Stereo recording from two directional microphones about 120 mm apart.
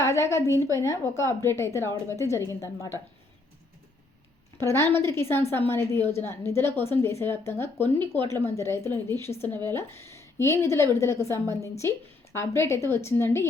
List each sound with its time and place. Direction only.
0.0 s a woman's voice: 25° left (ahead or behind)
4.8 s a woman's voice: 20° left (ahead or behind)